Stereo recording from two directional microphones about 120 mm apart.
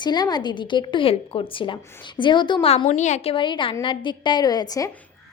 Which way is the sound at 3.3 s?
45° left (ahead or behind).